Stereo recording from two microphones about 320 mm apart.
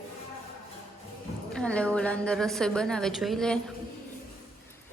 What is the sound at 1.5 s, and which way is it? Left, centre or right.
A woman's voice, centre.